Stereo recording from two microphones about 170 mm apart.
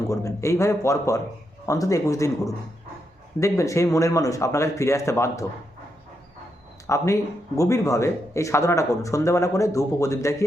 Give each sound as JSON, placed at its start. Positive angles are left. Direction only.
{"t": 0.1, "sound": "a man's voice", "side_deg": 20}
{"t": 6.8, "sound": "a man's voice", "side_deg": 15}